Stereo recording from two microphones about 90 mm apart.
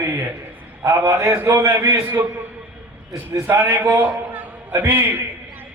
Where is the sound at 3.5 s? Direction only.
20° right (ahead or behind).